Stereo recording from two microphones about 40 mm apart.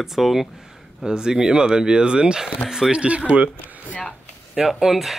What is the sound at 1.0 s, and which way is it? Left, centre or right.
Speech, centre.